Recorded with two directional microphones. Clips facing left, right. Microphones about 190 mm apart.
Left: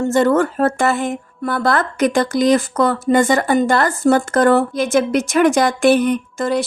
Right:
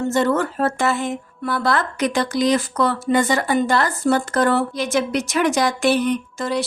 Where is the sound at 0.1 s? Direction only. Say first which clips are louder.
Left 6 dB; 50° left (ahead or behind).